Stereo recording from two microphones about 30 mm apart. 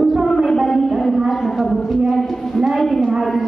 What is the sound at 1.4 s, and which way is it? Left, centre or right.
Clip-clop, centre.